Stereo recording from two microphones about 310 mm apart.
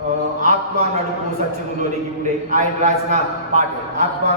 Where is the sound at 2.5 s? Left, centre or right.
Right.